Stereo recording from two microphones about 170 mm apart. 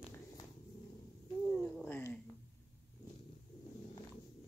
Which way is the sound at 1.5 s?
5° left (ahead or behind).